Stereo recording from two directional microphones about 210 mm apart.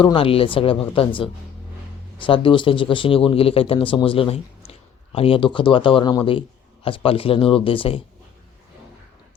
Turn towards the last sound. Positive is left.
turn(degrees=25)  # may be behind; listen again after turning